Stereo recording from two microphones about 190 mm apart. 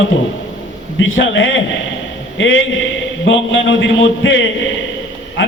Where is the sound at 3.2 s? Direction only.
80° left.